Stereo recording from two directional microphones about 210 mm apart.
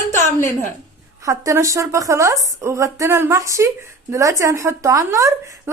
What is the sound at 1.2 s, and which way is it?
A woman's voice, 15° right (ahead or behind).